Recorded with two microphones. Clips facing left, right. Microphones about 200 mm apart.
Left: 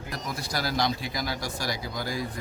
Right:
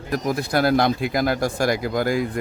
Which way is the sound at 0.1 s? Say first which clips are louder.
Right 12 dB; 55° right (ahead or behind).